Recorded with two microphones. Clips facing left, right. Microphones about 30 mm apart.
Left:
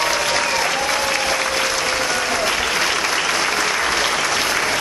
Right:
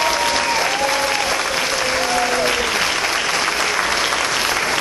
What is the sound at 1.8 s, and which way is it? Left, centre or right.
Applause, right.